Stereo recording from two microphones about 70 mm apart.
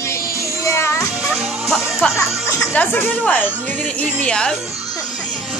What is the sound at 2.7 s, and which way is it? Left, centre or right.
Speech, left.